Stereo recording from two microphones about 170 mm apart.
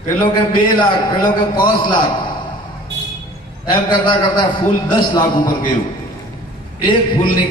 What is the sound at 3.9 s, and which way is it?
A man's voice, 25° left (ahead or behind).